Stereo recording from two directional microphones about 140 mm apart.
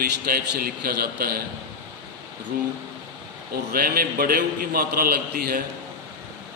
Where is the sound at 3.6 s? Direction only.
90° right.